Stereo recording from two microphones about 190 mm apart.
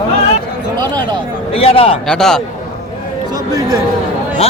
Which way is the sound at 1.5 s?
30° left (ahead or behind).